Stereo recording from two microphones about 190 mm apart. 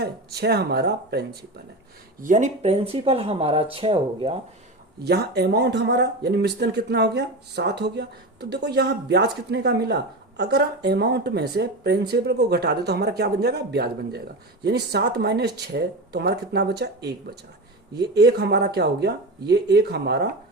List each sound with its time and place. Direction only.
0.0 s speech: 60° right (ahead or behind)
2.2 s speech: 40° right (ahead or behind)
5.0 s speech: 60° right (ahead or behind)